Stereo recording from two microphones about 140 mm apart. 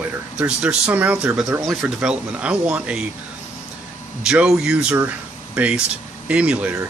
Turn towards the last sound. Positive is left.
turn(degrees=-10)  # may be behind; listen again after turning